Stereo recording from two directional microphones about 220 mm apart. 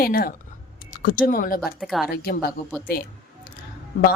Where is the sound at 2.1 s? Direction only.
45° left (ahead or behind).